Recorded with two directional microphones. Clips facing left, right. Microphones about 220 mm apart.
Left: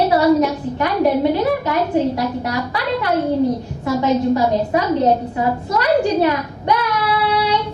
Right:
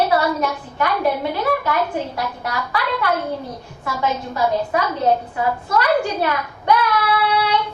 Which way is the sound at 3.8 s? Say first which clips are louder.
Left 8 dB; 20° left (ahead or behind).